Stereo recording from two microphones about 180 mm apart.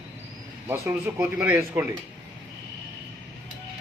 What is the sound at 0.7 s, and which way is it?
Speech, 15° right (ahead or behind).